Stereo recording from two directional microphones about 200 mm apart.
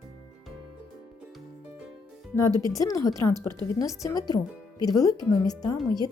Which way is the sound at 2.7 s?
15° left (ahead or behind).